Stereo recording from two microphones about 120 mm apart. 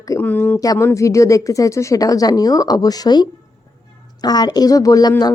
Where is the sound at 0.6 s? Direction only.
25° left (ahead or behind).